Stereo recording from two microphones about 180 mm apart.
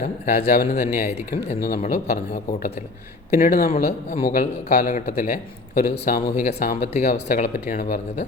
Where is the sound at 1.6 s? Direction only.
55° left (ahead or behind).